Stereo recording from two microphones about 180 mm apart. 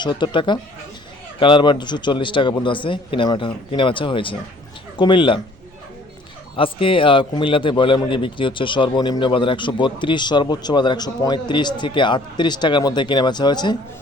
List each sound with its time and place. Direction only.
0.0 s a man's voice: 25° left (ahead or behind)
6.6 s a man's voice: 30° left (ahead or behind)